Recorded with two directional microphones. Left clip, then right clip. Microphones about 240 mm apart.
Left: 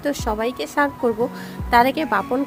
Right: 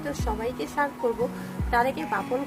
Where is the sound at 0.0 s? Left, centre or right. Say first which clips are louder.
Left 7 dB; left.